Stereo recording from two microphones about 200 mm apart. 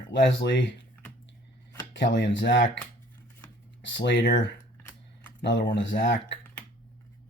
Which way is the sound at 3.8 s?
60° left (ahead or behind).